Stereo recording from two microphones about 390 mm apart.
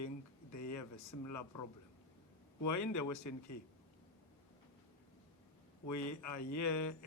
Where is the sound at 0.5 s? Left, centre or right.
Left.